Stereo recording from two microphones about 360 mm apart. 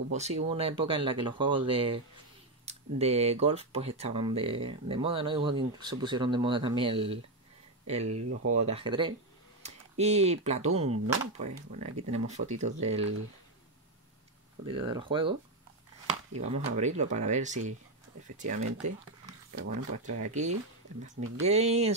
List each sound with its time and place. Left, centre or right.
0.1 s speech: centre
8.0 s speech: right
8.5 s speech: centre
14.7 s speech: centre
16.3 s speech: centre
19.5 s speech: right
20.2 s speech: centre